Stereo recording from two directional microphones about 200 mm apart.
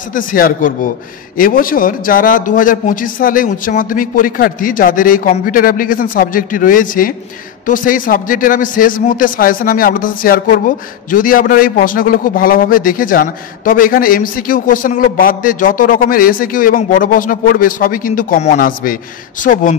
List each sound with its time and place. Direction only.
0.1 s a man's voice: 45° left (ahead or behind)